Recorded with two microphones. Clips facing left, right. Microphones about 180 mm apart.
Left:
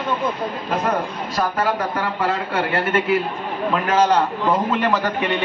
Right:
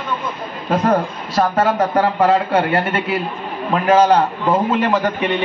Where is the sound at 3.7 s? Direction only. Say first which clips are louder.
Right 5 dB; 30° right (ahead or behind).